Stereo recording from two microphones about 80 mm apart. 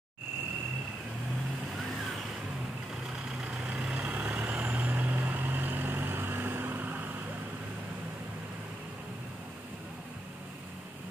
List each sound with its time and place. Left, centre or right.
3.3 s vehicle: centre